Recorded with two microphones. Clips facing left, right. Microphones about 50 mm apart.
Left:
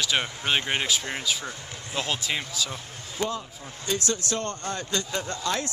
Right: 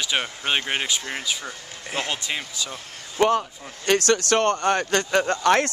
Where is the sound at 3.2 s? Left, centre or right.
Right.